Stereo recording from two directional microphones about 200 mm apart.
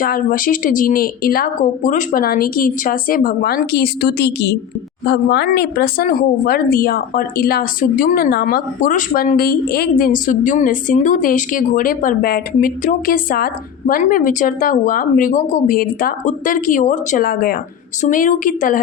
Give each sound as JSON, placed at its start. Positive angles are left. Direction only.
{"t": 0.0, "sound": "speech", "side_deg": 45}